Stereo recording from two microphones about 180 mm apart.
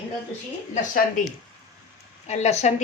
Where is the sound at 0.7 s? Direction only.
45° left (ahead or behind).